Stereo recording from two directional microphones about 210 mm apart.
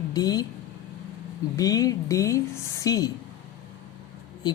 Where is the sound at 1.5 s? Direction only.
15° left (ahead or behind).